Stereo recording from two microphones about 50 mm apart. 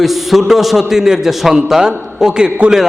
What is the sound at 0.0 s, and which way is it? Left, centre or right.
A man's voice, centre.